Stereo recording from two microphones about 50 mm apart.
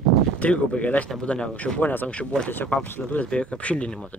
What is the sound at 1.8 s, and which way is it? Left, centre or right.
Speech, left.